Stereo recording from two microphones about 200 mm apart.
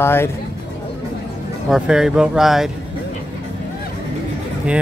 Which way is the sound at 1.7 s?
5° right (ahead or behind).